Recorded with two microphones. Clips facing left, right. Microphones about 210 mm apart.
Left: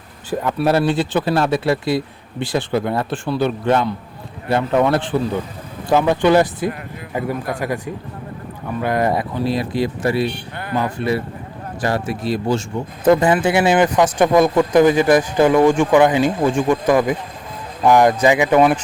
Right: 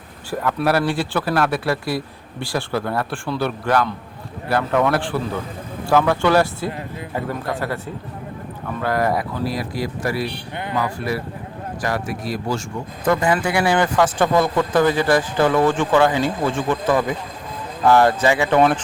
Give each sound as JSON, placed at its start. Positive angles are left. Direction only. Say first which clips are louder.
{"t": 0.3, "sound": "speech", "louder": "left 2 dB", "side_deg": 20}
{"t": 8.8, "sound": "speech", "louder": "left 2 dB", "side_deg": 20}